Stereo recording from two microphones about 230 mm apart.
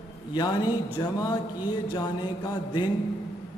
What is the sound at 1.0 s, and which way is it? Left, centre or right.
Mantra, centre.